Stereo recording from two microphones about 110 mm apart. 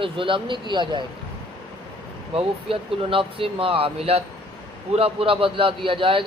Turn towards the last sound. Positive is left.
turn(degrees=-50)  # may be behind; listen again after turning